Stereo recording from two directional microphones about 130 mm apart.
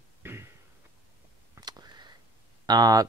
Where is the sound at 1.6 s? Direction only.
30° right (ahead or behind).